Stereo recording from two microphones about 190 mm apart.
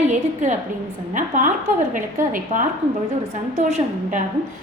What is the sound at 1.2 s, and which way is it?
A woman's voice, 45° right (ahead or behind).